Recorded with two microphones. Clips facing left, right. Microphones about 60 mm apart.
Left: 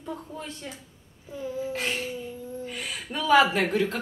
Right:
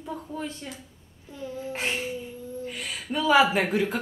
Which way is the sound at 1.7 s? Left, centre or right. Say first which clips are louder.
Right 3 dB; right.